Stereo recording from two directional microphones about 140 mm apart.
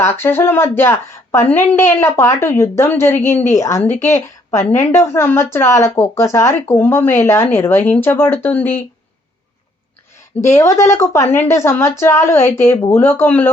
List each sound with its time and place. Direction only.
0.0 s a woman's voice: 15° left (ahead or behind)
10.4 s a woman's voice: 20° left (ahead or behind)